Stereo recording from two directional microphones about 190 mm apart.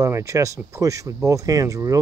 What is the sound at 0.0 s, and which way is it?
Speech, 15° right (ahead or behind).